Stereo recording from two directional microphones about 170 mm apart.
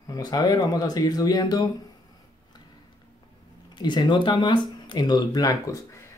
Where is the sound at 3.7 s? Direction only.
25° left (ahead or behind).